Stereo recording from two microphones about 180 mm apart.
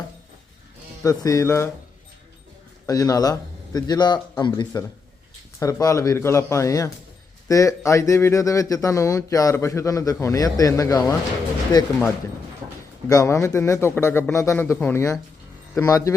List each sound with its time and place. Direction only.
1.0 s a man's voice: 20° left (ahead or behind)
2.8 s a man's voice: 20° left (ahead or behind)
13.1 s a man's voice: 15° left (ahead or behind)